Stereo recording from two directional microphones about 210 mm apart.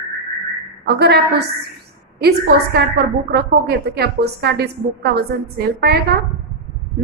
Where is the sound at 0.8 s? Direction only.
50° right (ahead or behind).